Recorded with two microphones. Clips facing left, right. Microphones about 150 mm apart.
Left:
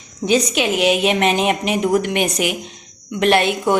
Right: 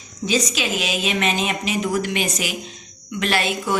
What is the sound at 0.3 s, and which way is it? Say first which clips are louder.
A woman's voice: left 5 dB; 60° left (ahead or behind).